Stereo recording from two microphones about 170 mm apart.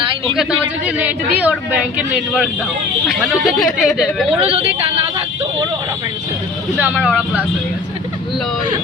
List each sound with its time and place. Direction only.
0.9 s speech: 10° right (ahead or behind)
4.4 s speech: 35° right (ahead or behind)
7.0 s speech: 5° right (ahead or behind)